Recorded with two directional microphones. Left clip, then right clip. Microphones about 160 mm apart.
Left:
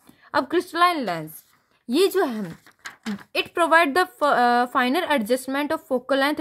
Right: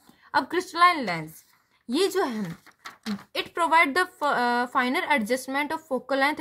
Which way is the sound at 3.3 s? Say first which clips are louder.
Left 4 dB; 55° left (ahead or behind).